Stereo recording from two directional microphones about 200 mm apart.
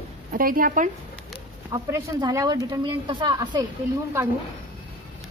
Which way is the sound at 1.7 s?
20° right (ahead or behind).